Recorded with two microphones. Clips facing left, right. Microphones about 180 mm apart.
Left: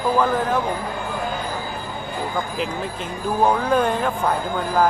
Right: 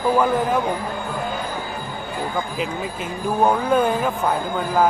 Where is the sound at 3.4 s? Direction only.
5° right (ahead or behind).